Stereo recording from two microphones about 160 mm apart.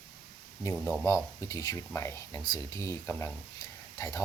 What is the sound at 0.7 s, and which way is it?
Speech, 5° left (ahead or behind).